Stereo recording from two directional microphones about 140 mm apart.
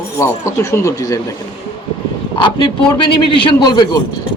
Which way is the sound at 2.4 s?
35° left (ahead or behind).